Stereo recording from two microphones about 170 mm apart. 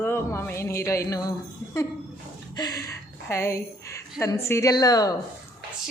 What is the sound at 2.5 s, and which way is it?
A woman's voice, 20° left (ahead or behind).